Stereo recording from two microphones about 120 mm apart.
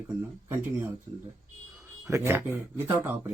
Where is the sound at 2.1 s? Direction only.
20° right (ahead or behind).